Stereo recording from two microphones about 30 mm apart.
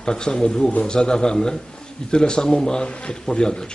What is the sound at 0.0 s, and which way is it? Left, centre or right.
A man's voice, left.